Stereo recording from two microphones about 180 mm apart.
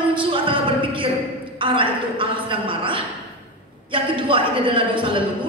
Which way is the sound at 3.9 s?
30° right (ahead or behind).